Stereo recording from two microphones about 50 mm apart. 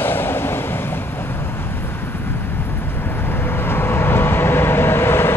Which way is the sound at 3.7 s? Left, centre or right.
Left.